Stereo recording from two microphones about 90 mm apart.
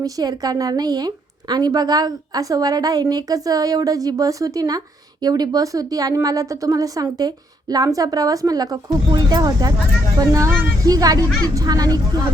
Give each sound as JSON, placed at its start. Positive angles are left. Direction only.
{"t": 0.0, "sound": "a woman's voice", "side_deg": -45}